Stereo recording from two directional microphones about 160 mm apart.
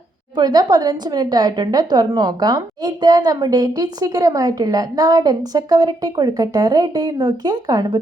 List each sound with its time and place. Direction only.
0.3 s a woman's voice: 25° right (ahead or behind)